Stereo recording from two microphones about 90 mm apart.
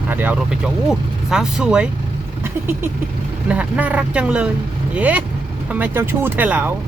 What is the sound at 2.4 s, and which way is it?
Vehicle, 25° right (ahead or behind).